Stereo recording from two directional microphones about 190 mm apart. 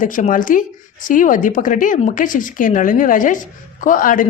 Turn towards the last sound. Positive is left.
turn(degrees=45)  # may be behind; listen again after turning